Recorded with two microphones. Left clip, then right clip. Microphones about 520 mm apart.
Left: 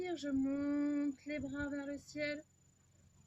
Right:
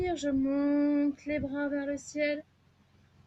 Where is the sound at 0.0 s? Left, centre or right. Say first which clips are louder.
Right 8 dB; right.